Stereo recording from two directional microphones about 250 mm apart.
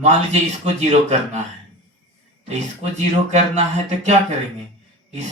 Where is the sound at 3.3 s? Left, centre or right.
Right.